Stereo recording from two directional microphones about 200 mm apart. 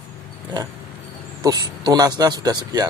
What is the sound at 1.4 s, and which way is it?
A man's voice, 20° right (ahead or behind).